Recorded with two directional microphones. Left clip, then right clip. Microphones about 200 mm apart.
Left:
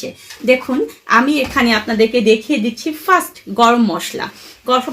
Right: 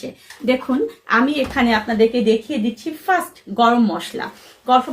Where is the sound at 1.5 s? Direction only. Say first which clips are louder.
Left 2 dB; 50° left (ahead or behind).